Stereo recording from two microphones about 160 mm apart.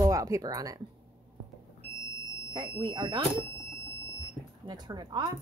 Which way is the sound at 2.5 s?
30° right (ahead or behind).